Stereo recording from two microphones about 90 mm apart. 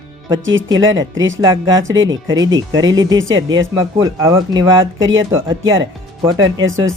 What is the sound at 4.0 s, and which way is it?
Speech, 35° right (ahead or behind).